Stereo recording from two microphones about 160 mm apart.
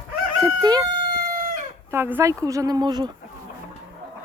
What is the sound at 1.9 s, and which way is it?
A woman's voice, 15° right (ahead or behind).